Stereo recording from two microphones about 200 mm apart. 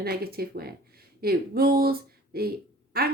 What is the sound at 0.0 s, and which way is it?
Speech, 50° right (ahead or behind).